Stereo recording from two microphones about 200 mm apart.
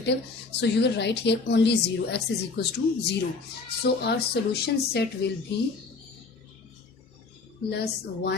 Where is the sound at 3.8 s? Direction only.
55° left (ahead or behind).